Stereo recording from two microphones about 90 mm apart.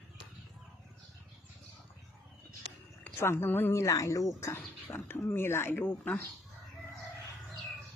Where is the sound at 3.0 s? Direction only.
25° left (ahead or behind).